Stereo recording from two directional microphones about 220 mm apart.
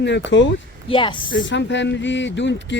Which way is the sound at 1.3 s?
55° left (ahead or behind).